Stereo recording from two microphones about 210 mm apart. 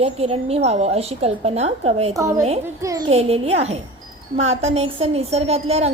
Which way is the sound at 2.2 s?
15° right (ahead or behind).